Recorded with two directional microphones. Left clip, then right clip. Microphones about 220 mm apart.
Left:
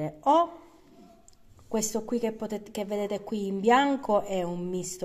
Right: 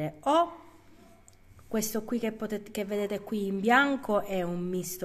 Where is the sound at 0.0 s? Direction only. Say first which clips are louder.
Left 2 dB; 15° right (ahead or behind).